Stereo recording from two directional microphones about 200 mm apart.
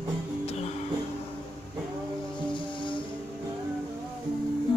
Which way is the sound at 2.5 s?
25° left (ahead or behind).